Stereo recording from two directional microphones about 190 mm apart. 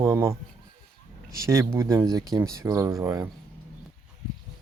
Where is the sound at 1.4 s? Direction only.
15° right (ahead or behind).